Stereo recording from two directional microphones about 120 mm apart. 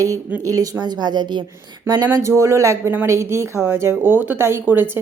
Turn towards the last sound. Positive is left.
turn(degrees=-15)  # may be behind; listen again after turning